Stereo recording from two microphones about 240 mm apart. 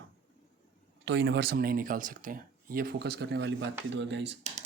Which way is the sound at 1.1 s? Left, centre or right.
Right.